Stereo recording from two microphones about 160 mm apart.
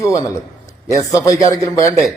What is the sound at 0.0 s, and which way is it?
A man's voice, 20° left (ahead or behind).